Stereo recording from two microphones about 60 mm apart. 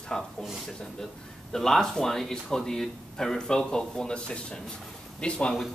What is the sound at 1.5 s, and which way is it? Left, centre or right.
Speech, centre.